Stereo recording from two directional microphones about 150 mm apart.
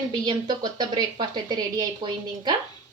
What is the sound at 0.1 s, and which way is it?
A woman's voice, 30° right (ahead or behind).